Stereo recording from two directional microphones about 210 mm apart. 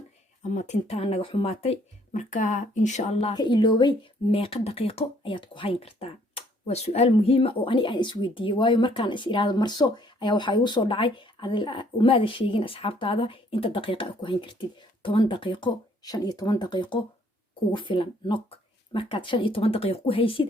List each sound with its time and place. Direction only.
0.5 s speech: 35° left (ahead or behind)